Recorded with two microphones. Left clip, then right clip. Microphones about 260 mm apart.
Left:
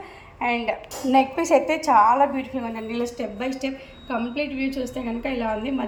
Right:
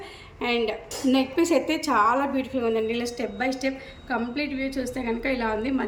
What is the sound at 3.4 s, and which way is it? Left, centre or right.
A woman's voice, right.